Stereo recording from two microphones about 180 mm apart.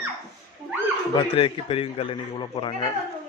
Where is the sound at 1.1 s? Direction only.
30° left (ahead or behind).